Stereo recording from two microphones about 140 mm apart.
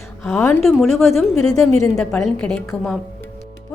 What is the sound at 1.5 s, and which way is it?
Speech, 25° left (ahead or behind).